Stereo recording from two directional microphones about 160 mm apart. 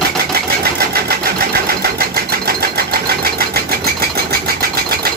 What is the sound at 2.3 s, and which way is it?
Sewing machine, 75° right (ahead or behind).